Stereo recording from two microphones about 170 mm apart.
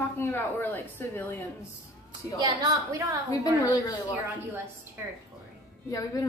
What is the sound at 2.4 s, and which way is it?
Speech, 20° right (ahead or behind).